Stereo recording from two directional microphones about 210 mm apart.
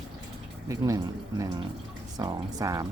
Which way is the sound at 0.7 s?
15° right (ahead or behind).